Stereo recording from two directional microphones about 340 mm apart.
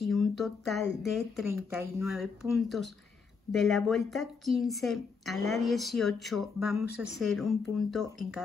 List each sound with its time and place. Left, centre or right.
0.0 s a woman's voice: centre
3.5 s a woman's voice: centre